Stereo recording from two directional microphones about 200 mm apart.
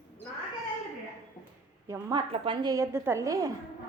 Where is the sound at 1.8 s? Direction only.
15° right (ahead or behind).